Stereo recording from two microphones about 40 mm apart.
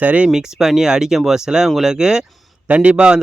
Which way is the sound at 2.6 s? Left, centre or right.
Right.